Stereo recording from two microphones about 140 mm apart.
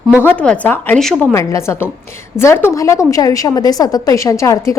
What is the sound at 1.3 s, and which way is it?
A woman's voice, 20° left (ahead or behind).